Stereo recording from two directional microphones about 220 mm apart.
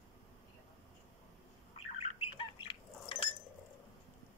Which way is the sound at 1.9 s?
25° left (ahead or behind).